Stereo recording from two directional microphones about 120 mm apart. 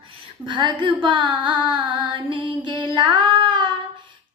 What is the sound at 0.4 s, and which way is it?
Female singing, 40° right (ahead or behind).